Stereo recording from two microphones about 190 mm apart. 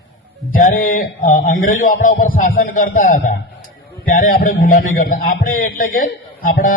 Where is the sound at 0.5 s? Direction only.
45° left (ahead or behind).